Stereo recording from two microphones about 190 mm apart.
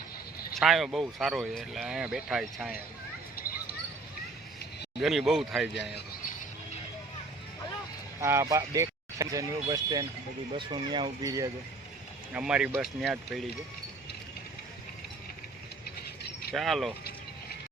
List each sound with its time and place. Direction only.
0.5 s speech: centre (ahead or behind)
3.3 s a sound: 50° left (ahead or behind)
4.9 s speech: centre (ahead or behind)
8.2 s speech: 15° right (ahead or behind)
12.3 s speech: 5° right (ahead or behind)
16.6 s speech: centre (ahead or behind)